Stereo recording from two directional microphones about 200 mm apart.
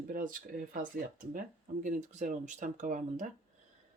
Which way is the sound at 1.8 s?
40° right (ahead or behind).